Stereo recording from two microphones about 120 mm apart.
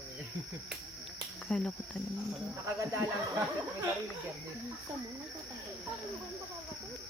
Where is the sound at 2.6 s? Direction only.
20° right (ahead or behind).